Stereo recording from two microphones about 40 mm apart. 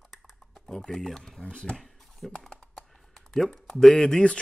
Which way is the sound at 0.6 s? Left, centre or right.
Centre.